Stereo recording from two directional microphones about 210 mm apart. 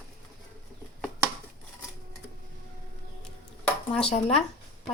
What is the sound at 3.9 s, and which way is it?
Speech, 30° left (ahead or behind).